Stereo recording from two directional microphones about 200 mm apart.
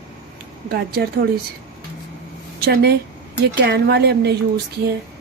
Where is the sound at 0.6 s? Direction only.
50° right (ahead or behind).